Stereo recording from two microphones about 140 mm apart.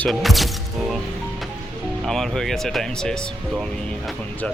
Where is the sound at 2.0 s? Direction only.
Centre (ahead or behind).